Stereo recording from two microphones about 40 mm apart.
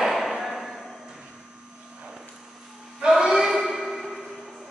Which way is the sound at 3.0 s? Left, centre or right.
Centre.